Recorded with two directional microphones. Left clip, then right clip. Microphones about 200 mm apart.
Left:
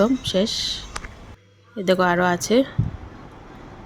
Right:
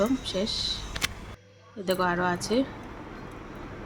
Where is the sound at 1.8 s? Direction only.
35° left (ahead or behind).